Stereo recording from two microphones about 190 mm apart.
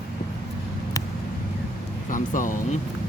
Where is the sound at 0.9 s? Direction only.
20° left (ahead or behind).